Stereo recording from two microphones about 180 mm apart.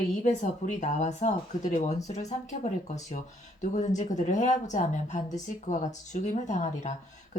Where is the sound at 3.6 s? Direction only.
40° left (ahead or behind).